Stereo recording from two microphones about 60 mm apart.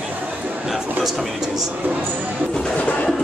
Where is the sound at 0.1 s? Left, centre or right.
Right.